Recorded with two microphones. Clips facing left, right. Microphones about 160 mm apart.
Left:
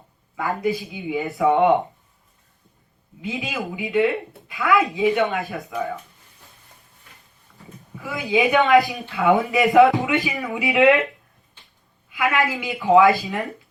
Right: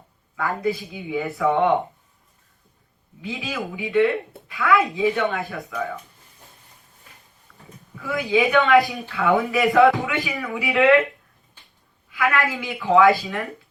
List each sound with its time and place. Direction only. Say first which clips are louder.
0.3 s speech: left 1 dB; 20° left (ahead or behind)
3.2 s speech: left 1 dB; 20° left (ahead or behind)
8.1 s speech: even; 20° left (ahead or behind)
12.1 s speech: left 1 dB; 20° left (ahead or behind)